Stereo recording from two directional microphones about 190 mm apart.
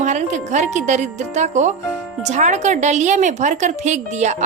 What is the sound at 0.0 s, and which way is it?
A woman's voice, 40° right (ahead or behind).